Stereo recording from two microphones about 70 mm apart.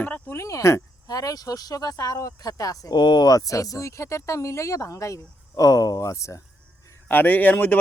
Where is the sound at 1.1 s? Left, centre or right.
Left.